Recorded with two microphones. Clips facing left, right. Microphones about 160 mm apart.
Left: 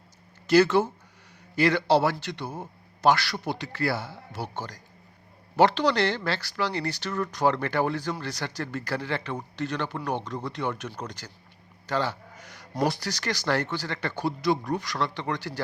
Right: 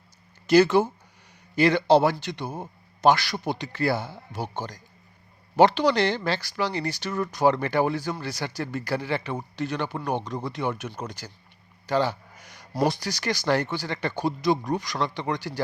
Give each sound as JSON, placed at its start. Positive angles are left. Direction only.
{"t": 0.4, "sound": "a man's voice", "side_deg": -15}
{"t": 11.9, "sound": "a sound", "side_deg": -15}
{"t": 12.9, "sound": "a man's voice", "side_deg": -15}